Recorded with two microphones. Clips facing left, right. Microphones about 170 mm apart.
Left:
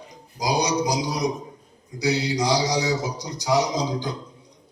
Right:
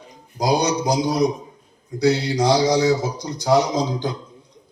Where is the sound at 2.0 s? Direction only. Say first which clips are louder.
Right 5 dB; 55° right (ahead or behind).